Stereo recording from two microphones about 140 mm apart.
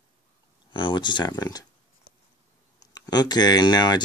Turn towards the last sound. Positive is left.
turn(degrees=30)  # may be behind; listen again after turning